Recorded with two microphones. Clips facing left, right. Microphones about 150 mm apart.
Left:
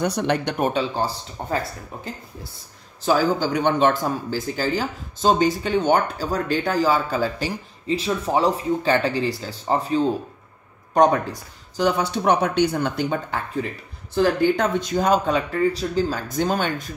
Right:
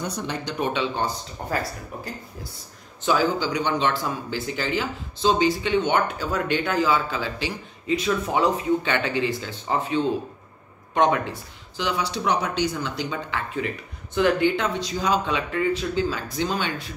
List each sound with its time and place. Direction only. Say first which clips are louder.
0.0 s speech: left 7 dB; 70° left (ahead or behind)
0.6 s speech: left 3 dB; 35° left (ahead or behind)
3.1 s speech: left 2 dB; 45° left (ahead or behind)
7.9 s speech: left 1 dB; 30° left (ahead or behind); by 13.4 s 55° left (ahead or behind)
14.1 s speech: left 2 dB; 35° left (ahead or behind)